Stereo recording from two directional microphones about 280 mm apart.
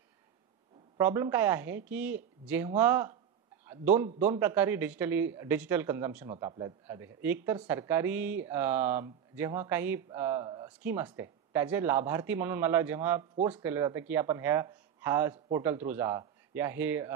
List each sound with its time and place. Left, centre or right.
0.9 s speech: centre